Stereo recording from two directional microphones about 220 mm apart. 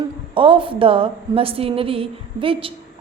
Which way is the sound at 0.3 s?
25° right (ahead or behind).